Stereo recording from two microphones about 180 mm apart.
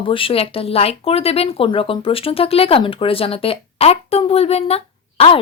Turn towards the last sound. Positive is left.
turn(degrees=35)  # may be behind; listen again after turning